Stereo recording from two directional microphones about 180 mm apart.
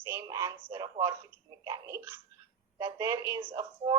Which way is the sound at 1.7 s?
15° right (ahead or behind).